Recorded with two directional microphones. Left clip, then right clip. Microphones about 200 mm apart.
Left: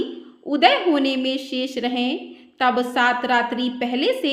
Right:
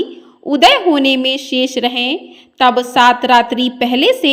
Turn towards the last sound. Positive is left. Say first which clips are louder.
# right 9 dB
turn(degrees=-35)  # may be behind; listen again after turning